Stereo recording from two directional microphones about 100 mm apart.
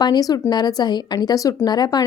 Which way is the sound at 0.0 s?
40° left (ahead or behind).